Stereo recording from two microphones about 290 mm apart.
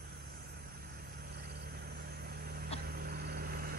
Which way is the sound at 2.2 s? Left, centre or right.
Right.